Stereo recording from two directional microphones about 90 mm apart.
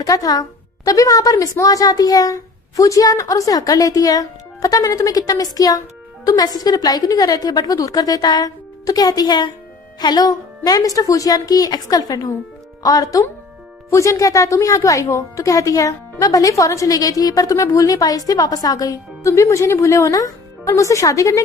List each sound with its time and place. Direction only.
0.0 s a woman's voice: 45° left (ahead or behind)